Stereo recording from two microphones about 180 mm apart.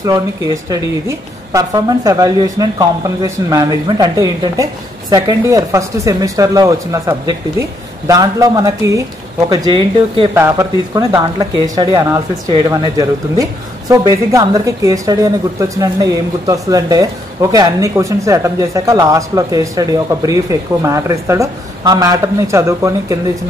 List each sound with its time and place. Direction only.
0.7 s speech: 20° right (ahead or behind)
10.3 s speech: 15° right (ahead or behind)